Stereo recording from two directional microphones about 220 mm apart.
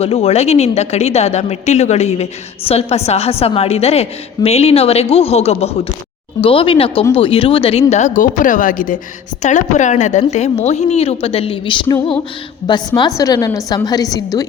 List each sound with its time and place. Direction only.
0.0 s a woman's voice: 25° left (ahead or behind)